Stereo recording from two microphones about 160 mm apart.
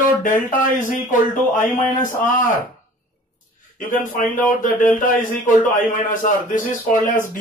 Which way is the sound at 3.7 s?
55° left (ahead or behind).